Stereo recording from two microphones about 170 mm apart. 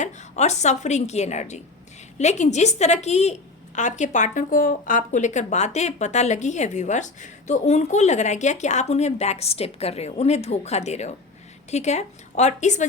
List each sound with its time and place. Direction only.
0.0 s a woman's voice: 45° left (ahead or behind)